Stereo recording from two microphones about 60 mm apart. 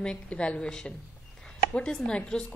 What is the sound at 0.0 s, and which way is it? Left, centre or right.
Speech, centre.